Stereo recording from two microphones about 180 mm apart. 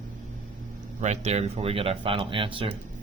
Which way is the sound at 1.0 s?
40° right (ahead or behind).